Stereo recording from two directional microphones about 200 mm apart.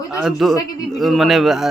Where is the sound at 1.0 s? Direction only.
Centre (ahead or behind).